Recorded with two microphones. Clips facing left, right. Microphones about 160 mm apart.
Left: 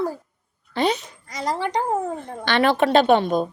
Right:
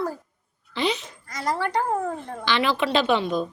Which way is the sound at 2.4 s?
55° left (ahead or behind).